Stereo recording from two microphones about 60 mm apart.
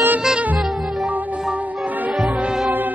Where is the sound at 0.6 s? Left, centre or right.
Centre.